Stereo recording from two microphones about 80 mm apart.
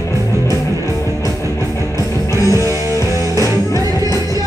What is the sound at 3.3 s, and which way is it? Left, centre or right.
Music, left.